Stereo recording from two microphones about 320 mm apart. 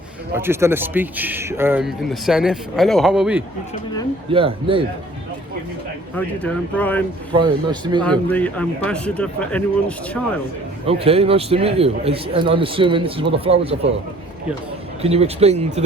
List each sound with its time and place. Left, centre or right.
0.3 s speech: centre
4.3 s a man's voice: centre
6.1 s speech: centre
7.3 s a man's voice: centre
8.0 s speech: centre
10.8 s a man's voice: centre
15.0 s speech: centre